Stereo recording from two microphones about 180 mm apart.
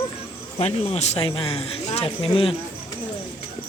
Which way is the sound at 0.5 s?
35° left (ahead or behind).